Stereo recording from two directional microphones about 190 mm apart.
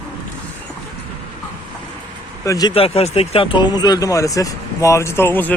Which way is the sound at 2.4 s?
15° left (ahead or behind).